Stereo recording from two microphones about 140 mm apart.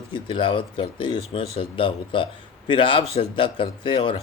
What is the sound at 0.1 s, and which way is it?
A man's voice, 40° left (ahead or behind).